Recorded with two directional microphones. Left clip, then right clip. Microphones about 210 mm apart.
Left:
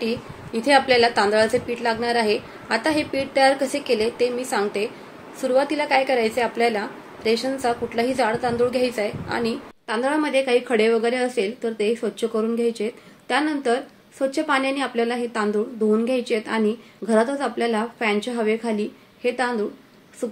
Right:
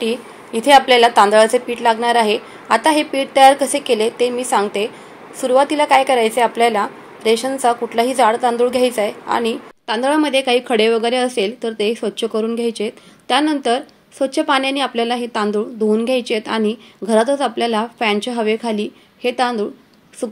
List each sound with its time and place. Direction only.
0.6 s a woman's voice: 15° right (ahead or behind)
9.8 s a woman's voice: 40° right (ahead or behind)